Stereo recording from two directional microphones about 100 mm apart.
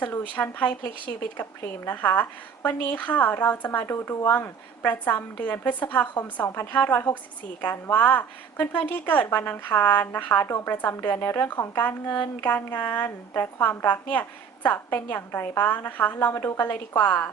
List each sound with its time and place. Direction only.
0.0 s a woman's voice: 20° left (ahead or behind)
16.3 s speech: 30° left (ahead or behind)
16.6 s a woman's voice: 15° left (ahead or behind)